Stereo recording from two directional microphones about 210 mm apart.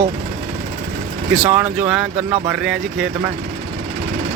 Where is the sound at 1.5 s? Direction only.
10° right (ahead or behind).